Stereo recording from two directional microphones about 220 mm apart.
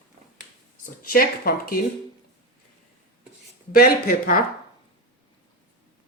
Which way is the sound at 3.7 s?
40° left (ahead or behind).